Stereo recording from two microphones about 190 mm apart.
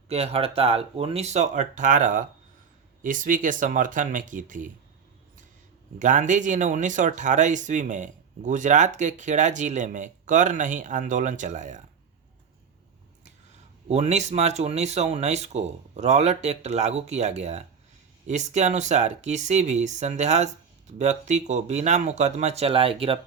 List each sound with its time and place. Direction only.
0.1 s speech: 30° right (ahead or behind)
6.0 s speech: 40° right (ahead or behind)
13.9 s speech: 35° right (ahead or behind)